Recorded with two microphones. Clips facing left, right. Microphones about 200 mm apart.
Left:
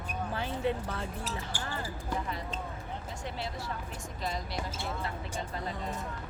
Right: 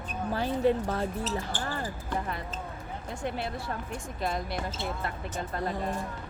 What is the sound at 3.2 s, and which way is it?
Speech, 55° right (ahead or behind).